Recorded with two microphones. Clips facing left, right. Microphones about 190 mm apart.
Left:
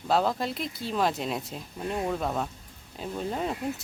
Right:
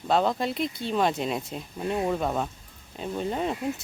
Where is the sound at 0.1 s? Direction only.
Centre (ahead or behind).